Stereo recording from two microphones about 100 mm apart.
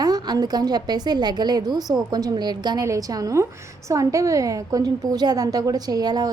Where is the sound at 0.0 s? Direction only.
40° right (ahead or behind).